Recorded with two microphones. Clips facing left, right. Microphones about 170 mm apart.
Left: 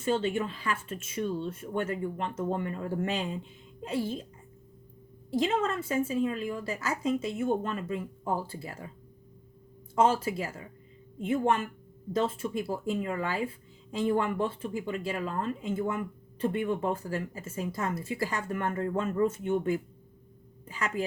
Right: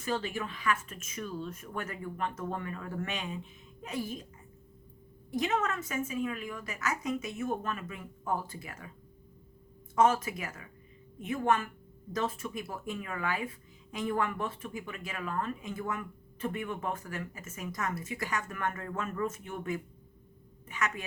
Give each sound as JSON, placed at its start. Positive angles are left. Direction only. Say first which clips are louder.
{"t": 0.0, "sound": "speech", "louder": "left 6 dB", "side_deg": 25}
{"t": 5.3, "sound": "speech", "louder": "left 3 dB", "side_deg": 30}
{"t": 9.9, "sound": "a woman's voice", "louder": "left 1 dB", "side_deg": 30}